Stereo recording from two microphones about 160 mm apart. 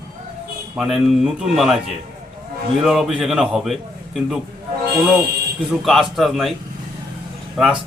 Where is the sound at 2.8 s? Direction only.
Centre (ahead or behind).